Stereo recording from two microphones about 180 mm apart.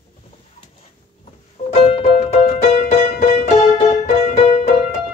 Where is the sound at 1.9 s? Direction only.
40° left (ahead or behind).